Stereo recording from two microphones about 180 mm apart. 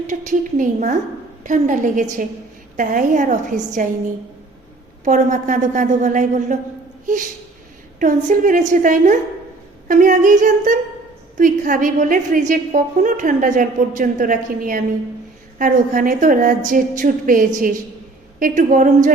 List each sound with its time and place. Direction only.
0.1 s a woman's voice: 45° right (ahead or behind)
5.0 s a woman's voice: 45° right (ahead or behind)